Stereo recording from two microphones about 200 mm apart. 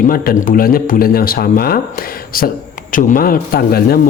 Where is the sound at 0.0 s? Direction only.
45° left (ahead or behind).